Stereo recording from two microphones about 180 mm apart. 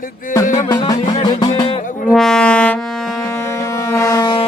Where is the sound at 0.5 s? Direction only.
30° left (ahead or behind).